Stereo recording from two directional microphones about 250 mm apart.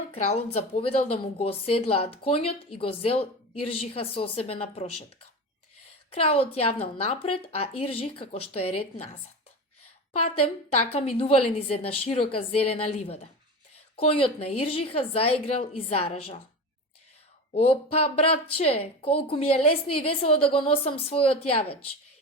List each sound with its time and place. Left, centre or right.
0.1 s speech: left
6.1 s speech: left
10.2 s speech: left
17.5 s speech: left